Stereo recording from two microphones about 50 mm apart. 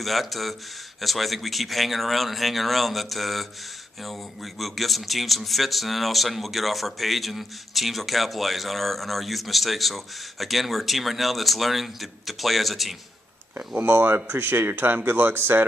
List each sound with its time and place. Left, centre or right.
0.0 s speech: centre
13.7 s speech: right